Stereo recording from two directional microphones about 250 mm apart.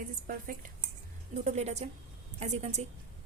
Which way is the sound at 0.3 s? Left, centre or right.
Right.